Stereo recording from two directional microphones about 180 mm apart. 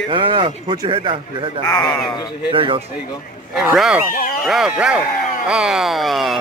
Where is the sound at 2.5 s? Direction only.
30° right (ahead or behind).